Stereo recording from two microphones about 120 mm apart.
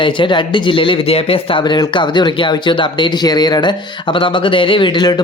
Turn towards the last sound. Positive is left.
turn(degrees=35)  # may be behind; listen again after turning